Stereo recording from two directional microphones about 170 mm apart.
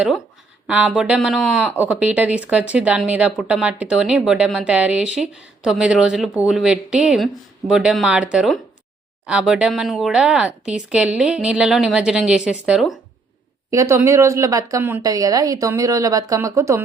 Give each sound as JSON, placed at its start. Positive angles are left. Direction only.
{"t": 0.7, "sound": "speech", "side_deg": -5}
{"t": 13.7, "sound": "speech", "side_deg": -15}